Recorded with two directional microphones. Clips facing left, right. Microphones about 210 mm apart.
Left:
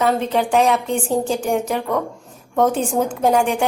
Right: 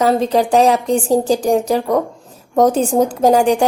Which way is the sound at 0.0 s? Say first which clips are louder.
Right 4 dB; 35° right (ahead or behind).